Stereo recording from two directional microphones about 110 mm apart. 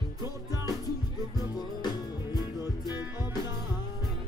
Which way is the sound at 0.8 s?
35° left (ahead or behind).